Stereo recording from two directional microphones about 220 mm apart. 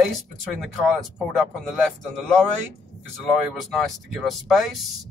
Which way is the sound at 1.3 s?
Centre (ahead or behind).